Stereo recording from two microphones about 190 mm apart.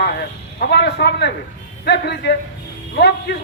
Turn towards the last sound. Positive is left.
turn(degrees=60)  # may be behind; listen again after turning